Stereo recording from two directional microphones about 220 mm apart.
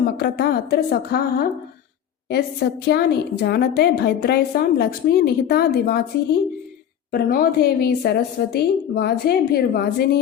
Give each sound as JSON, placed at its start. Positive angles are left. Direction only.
{"t": 0.0, "sound": "a woman's voice", "side_deg": 45}